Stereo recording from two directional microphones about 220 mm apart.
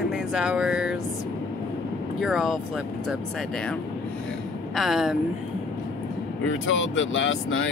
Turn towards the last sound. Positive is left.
turn(degrees=60)  # may be behind; listen again after turning